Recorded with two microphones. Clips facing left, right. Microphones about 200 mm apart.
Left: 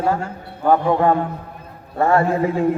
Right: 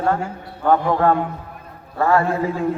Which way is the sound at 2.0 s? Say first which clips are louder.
Left 1 dB; 25° left (ahead or behind).